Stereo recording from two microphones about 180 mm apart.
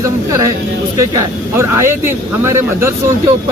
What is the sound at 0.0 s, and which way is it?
Speech, 15° right (ahead or behind).